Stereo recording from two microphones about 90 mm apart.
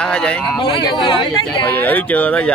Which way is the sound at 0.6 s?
60° left (ahead or behind).